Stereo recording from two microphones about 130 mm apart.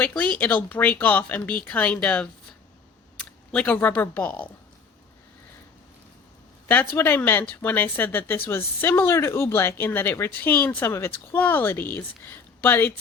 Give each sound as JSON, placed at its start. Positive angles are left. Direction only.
{"t": 0.0, "sound": "speech", "side_deg": 10}
{"t": 6.7, "sound": "speech", "side_deg": 15}